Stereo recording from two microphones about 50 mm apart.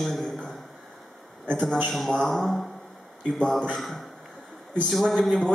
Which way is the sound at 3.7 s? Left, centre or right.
Centre.